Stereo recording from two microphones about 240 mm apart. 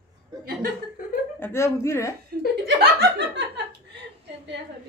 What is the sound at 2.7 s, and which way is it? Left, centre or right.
Speech, right.